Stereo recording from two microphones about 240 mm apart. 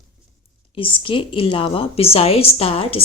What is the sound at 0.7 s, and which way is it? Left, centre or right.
A woman's voice, left.